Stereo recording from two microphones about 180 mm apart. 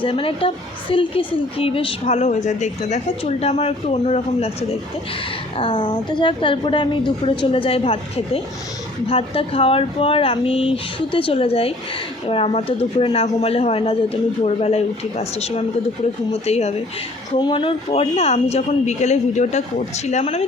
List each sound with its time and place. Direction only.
0.0 s a woman's voice: 30° left (ahead or behind)
5.5 s a woman's voice: 25° left (ahead or behind)
16.3 s a woman's voice: 35° left (ahead or behind)